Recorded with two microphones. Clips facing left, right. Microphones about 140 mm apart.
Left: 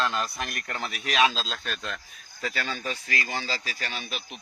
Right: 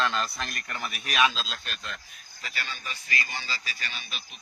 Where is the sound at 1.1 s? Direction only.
35° left (ahead or behind).